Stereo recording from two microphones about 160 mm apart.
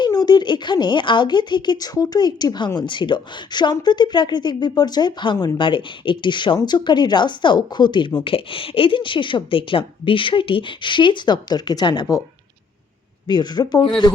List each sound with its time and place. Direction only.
0.0 s a woman's voice: 25° left (ahead or behind)
13.2 s speech: 25° left (ahead or behind)